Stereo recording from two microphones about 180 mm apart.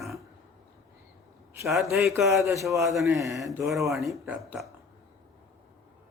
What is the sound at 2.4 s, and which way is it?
Speech, 15° right (ahead or behind).